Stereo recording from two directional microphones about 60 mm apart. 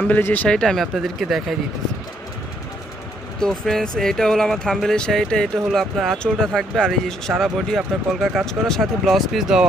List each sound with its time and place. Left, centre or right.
0.5 s speech: centre
0.9 s speech: centre
3.3 s speech: centre